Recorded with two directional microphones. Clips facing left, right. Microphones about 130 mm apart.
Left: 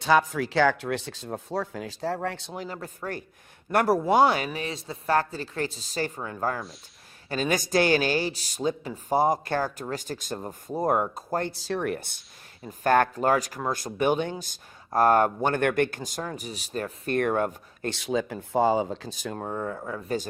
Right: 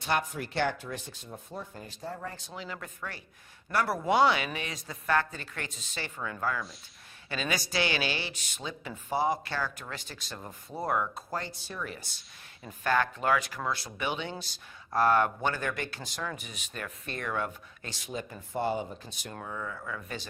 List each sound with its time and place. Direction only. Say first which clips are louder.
0.0 s speech: left 9 dB; 90° left; by 2.4 s 75° left (ahead or behind)
2.7 s speech: left 4 dB; 35° left (ahead or behind)
4.1 s speech: left 1 dB; 45° left (ahead or behind)
11.5 s speech: left 11 dB; 90° left; by 16.0 s 55° left (ahead or behind)
16.0 s speech: left 4 dB; 40° left (ahead or behind)
17.1 s speech: left 10 dB; 55° left (ahead or behind)
17.9 s speech: left 10 dB; 90° left
19.4 s speech: left 6 dB; 40° left (ahead or behind)